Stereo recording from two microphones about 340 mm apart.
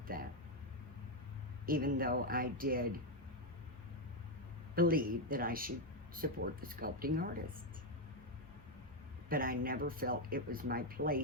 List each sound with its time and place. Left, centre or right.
0.1 s a sound: right
1.6 s speech: right
4.7 s speech: right
9.3 s speech: right